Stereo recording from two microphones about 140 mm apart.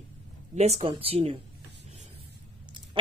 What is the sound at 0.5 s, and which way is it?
Speech, 50° right (ahead or behind).